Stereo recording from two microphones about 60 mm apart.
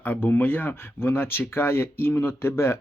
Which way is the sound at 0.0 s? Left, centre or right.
Left.